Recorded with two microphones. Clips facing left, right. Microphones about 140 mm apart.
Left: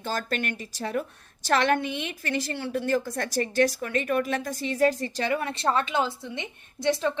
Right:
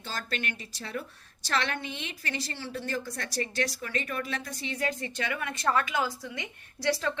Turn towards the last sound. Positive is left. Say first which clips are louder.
# left 4 dB
turn(degrees=20)  # may be behind; listen again after turning